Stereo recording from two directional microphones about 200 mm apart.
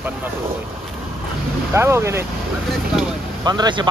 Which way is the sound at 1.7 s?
15° right (ahead or behind).